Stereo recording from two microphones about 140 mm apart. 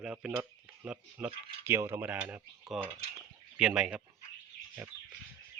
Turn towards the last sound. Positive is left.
turn(degrees=-10)  # may be behind; listen again after turning